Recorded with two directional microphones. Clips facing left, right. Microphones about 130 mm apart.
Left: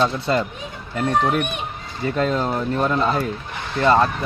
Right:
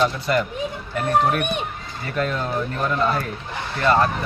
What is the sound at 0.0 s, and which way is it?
Speech, 25° left (ahead or behind).